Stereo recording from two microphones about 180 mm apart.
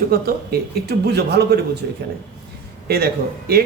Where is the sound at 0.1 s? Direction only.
60° right (ahead or behind).